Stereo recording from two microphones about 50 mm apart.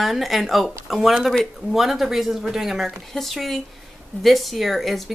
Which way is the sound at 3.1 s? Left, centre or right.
Centre.